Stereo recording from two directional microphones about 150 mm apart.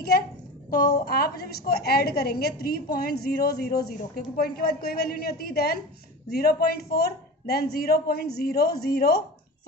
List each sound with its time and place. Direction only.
0.7 s a woman's voice: 75° left (ahead or behind); by 9.2 s 90° left